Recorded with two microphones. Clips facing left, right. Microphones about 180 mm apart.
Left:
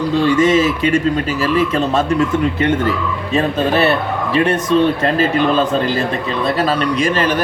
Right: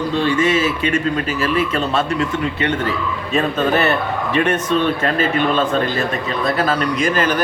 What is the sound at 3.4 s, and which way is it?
A man's voice, 35° left (ahead or behind).